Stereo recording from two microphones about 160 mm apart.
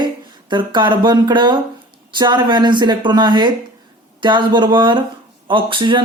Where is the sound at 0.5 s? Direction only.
30° right (ahead or behind).